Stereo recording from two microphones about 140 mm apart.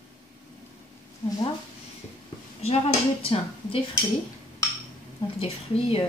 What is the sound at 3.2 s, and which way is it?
Speech, 45° left (ahead or behind).